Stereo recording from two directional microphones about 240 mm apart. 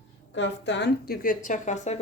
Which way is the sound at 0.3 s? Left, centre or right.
Left.